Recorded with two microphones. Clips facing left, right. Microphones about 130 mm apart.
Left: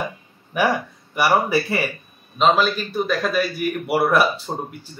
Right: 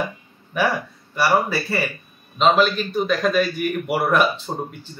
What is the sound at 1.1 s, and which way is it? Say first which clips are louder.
Speech: left 1 dB; 15° left (ahead or behind).